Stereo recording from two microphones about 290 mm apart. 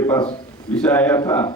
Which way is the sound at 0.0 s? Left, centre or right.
Centre.